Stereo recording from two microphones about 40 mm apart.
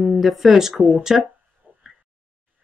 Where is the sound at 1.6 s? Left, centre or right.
Right.